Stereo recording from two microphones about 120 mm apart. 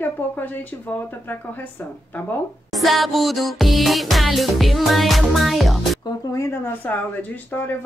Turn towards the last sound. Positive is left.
turn(degrees=15)  # may be behind; listen again after turning